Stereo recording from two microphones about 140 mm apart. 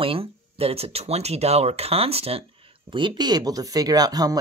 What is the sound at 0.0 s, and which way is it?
Speech, 40° right (ahead or behind).